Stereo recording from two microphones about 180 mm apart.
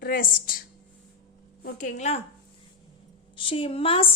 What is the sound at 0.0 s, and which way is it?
Speech, 50° left (ahead or behind).